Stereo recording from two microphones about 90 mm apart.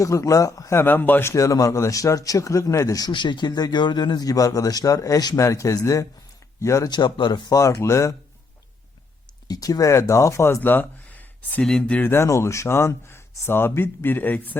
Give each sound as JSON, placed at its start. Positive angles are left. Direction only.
{"t": 0.0, "sound": "a man's voice", "side_deg": 35}
{"t": 0.8, "sound": "speech", "side_deg": 20}
{"t": 1.3, "sound": "a man's voice", "side_deg": 35}
{"t": 3.1, "sound": "a man's voice", "side_deg": 60}
{"t": 6.9, "sound": "speech", "side_deg": 55}
{"t": 7.5, "sound": "a man's voice", "side_deg": 35}
{"t": 9.5, "sound": "speech", "side_deg": 45}
{"t": 11.6, "sound": "speech", "side_deg": 5}
{"t": 12.0, "sound": "speech", "side_deg": 30}